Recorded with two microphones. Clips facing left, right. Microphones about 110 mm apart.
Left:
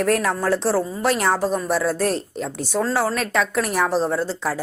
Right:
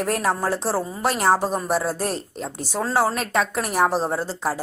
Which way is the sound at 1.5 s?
40° right (ahead or behind).